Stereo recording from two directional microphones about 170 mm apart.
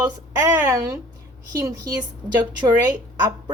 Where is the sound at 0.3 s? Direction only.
20° right (ahead or behind).